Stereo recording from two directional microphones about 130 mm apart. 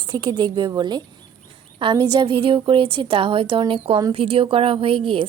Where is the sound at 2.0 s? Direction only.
35° right (ahead or behind).